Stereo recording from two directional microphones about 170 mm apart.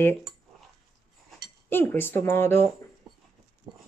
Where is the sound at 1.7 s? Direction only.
15° left (ahead or behind).